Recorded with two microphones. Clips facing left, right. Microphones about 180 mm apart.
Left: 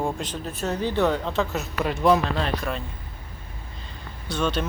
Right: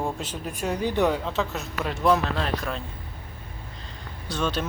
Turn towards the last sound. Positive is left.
turn(degrees=0)  # may be behind; listen again after turning